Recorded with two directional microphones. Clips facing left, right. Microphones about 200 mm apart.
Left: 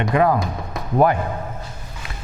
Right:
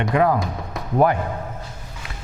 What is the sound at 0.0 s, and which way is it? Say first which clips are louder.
A man's voice: left 1 dB; 15° left (ahead or behind).